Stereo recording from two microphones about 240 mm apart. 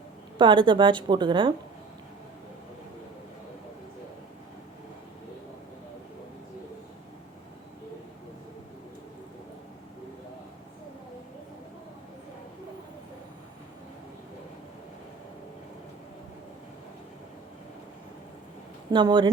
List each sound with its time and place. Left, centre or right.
0.3 s a woman's voice: centre
18.9 s speech: centre